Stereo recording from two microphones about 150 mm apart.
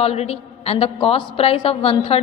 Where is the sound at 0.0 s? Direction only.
45° left (ahead or behind).